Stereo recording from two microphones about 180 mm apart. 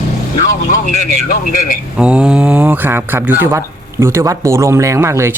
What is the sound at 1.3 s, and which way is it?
Speech, 50° left (ahead or behind).